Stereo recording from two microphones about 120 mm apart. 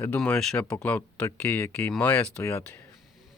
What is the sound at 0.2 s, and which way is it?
Speech, 5° left (ahead or behind).